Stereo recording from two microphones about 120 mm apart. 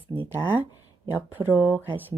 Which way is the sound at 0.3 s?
20° right (ahead or behind).